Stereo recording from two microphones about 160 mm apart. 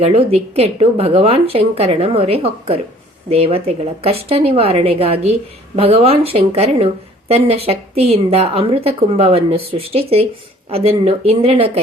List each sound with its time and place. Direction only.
0.0 s a woman's voice: 40° right (ahead or behind)